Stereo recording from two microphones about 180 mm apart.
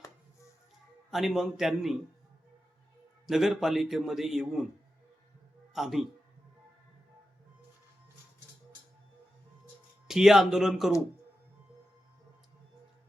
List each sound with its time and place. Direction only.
1.1 s a man's voice: centre (ahead or behind)
3.2 s a man's voice: centre (ahead or behind)
5.7 s a man's voice: centre (ahead or behind)
10.1 s a man's voice: centre (ahead or behind)